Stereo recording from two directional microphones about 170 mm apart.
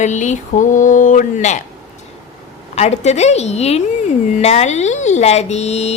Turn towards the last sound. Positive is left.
turn(degrees=40)  # may be behind; listen again after turning